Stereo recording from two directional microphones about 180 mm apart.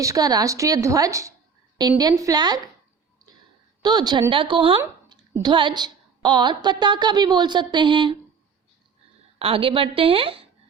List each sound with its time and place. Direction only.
0.0 s a woman's voice: 20° right (ahead or behind)
3.8 s a woman's voice: 25° right (ahead or behind)
9.4 s a woman's voice: 30° right (ahead or behind)